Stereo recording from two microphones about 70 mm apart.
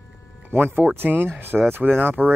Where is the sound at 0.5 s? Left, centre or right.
Right.